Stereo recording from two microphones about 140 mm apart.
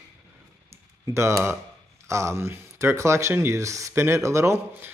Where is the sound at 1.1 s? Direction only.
20° right (ahead or behind).